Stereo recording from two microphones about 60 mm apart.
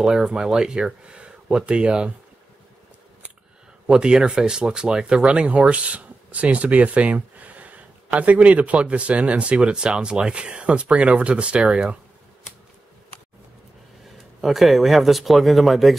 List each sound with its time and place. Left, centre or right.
0.0 s speech: centre
3.8 s speech: centre
14.4 s speech: centre